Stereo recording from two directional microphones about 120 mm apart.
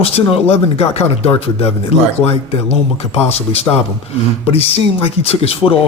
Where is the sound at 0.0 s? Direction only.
55° left (ahead or behind).